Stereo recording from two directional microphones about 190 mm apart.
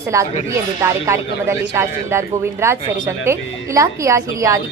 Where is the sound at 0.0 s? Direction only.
15° right (ahead or behind).